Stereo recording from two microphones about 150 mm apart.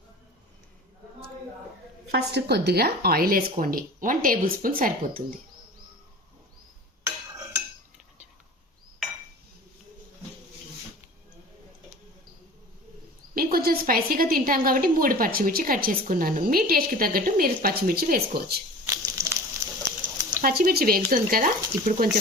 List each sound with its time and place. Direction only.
2.1 s a woman's voice: 90° right
3.6 s a woman's voice: 70° right (ahead or behind)
7.0 s a sound: 20° right (ahead or behind)
13.3 s a woman's voice: 85° right
18.9 s a sound: 20° right (ahead or behind)
20.3 s a woman's voice: 75° right (ahead or behind)